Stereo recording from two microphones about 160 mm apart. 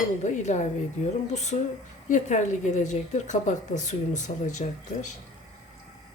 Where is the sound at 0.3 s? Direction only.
45° left (ahead or behind).